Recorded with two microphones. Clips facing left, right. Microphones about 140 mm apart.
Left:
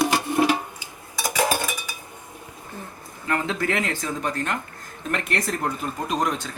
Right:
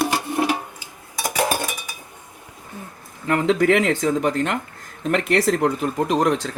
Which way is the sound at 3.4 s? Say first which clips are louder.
Right 8 dB; 75° right (ahead or behind).